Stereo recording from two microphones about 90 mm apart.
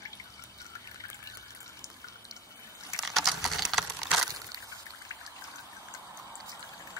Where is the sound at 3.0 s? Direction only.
Centre (ahead or behind).